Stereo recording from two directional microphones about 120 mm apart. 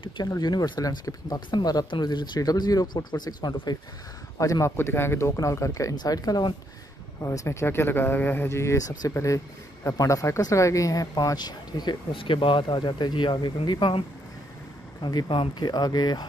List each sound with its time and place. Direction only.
0.4 s speech: 35° left (ahead or behind)